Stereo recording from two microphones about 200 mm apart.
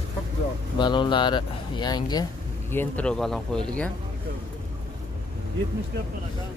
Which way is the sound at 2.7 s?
10° left (ahead or behind).